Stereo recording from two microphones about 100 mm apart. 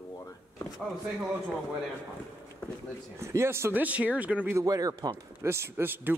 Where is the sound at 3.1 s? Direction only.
30° right (ahead or behind).